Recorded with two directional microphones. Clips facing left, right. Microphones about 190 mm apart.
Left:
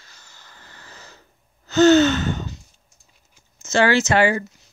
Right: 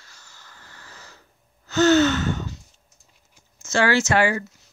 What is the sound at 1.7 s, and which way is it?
Gasp, 20° left (ahead or behind).